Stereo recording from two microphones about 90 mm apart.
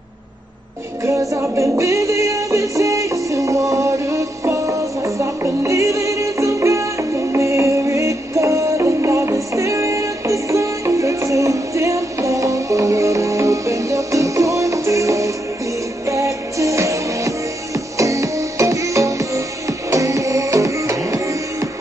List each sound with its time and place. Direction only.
1.3 s music: 35° right (ahead or behind)